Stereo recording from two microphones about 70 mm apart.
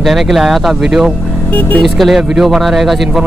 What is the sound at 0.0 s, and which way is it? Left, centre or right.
Speech, centre.